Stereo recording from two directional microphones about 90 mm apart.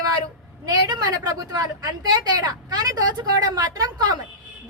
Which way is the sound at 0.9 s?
45° right (ahead or behind).